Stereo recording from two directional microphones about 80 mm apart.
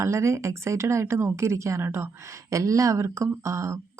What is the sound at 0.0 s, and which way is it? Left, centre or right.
Speech, right.